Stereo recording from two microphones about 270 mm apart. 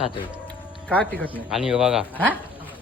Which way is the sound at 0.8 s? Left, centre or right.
Centre.